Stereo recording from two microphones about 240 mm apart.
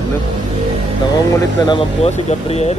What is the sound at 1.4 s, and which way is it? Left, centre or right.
Speech, centre.